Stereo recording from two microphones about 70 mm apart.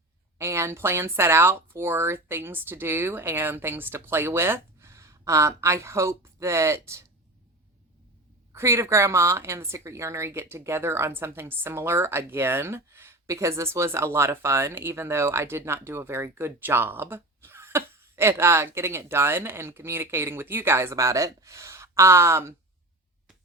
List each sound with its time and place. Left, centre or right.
0.3 s speech: right
8.5 s speech: right
20.9 s speech: right